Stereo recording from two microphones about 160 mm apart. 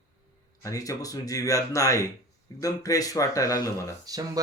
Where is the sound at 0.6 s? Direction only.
20° left (ahead or behind).